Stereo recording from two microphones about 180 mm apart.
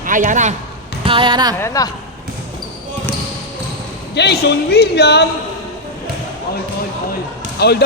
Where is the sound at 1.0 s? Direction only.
30° right (ahead or behind).